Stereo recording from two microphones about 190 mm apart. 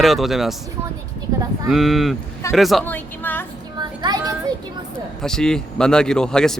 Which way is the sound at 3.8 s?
20° right (ahead or behind).